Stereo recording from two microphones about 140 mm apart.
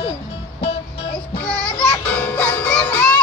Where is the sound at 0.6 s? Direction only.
45° left (ahead or behind).